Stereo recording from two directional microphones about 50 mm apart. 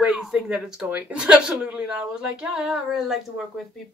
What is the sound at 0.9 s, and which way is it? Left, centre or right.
Speech, right.